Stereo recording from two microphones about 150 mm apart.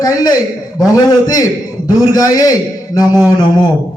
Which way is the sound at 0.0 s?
25° left (ahead or behind).